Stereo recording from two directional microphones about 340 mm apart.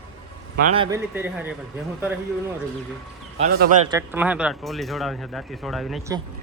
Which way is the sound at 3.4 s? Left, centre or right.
Right.